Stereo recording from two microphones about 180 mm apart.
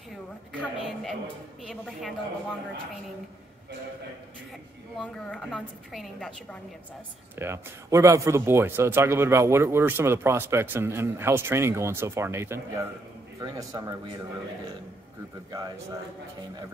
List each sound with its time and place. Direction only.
0.1 s a woman's voice: centre (ahead or behind)
4.9 s a woman's voice: 5° left (ahead or behind)
7.3 s speech: 15° right (ahead or behind)